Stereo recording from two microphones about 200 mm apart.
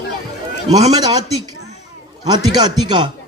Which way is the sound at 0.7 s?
20° right (ahead or behind).